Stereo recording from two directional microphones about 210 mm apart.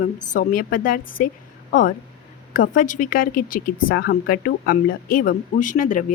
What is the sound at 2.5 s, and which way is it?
Speech, 40° left (ahead or behind).